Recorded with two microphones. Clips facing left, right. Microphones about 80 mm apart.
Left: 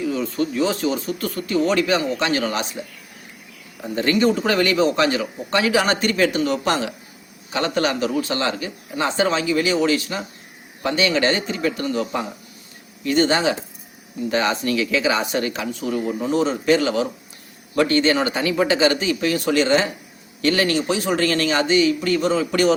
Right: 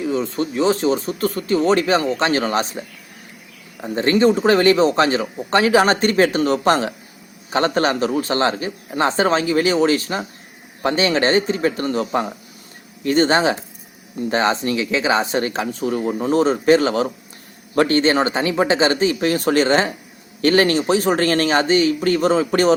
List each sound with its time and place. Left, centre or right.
0.0 s a man's voice: right
3.8 s a man's voice: right